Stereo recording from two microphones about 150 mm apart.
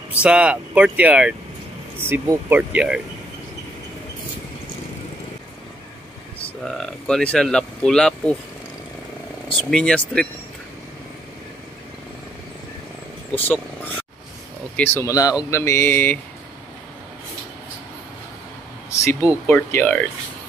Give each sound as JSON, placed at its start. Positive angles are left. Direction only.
{"t": 0.1, "sound": "speech", "side_deg": -5}
{"t": 6.6, "sound": "speech", "side_deg": 0}
{"t": 9.6, "sound": "speech", "side_deg": 5}
{"t": 13.3, "sound": "speech", "side_deg": 10}
{"t": 19.4, "sound": "speech", "side_deg": 15}